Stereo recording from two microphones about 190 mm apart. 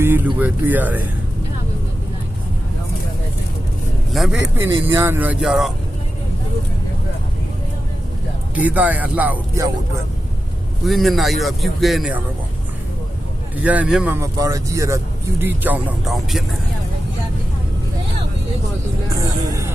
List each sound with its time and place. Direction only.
0.0 s music: 10° right (ahead or behind)
0.3 s speech: 10° right (ahead or behind)
4.1 s a man's voice: centre (ahead or behind)
4.9 s speech: 10° right (ahead or behind)
8.5 s speech: 10° right (ahead or behind)
10.8 s a man's voice: centre (ahead or behind)
13.6 s speech: 10° right (ahead or behind)
19.1 s a sound: 15° right (ahead or behind)